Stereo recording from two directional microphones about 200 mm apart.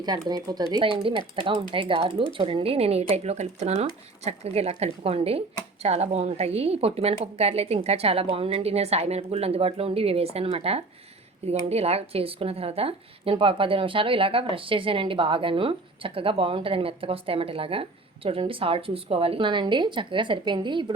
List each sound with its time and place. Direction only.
0.0 s a woman's voice: 20° right (ahead or behind)